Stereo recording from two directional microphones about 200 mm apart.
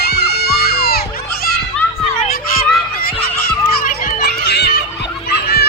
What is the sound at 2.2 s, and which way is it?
Children playing, 45° left (ahead or behind).